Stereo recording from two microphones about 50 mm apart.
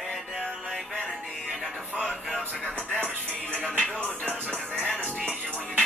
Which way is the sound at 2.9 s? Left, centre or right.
Right.